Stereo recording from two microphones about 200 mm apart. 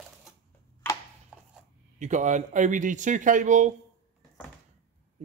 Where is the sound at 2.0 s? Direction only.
35° right (ahead or behind).